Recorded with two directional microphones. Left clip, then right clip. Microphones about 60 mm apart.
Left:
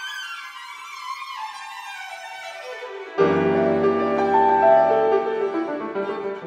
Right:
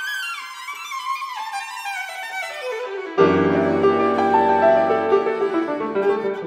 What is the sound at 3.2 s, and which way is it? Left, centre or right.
Music, right.